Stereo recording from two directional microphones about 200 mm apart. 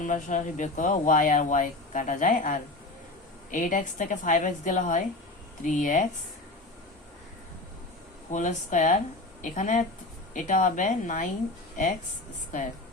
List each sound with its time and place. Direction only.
0.0 s speech: 40° left (ahead or behind)
8.3 s speech: 40° left (ahead or behind)